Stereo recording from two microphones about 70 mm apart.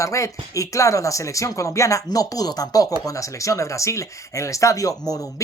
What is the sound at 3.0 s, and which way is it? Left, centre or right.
Speech, left.